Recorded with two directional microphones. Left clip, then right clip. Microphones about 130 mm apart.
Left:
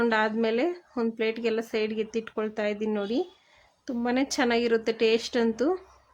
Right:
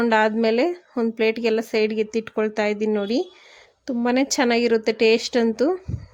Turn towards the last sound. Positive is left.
turn(degrees=-35)  # may be behind; listen again after turning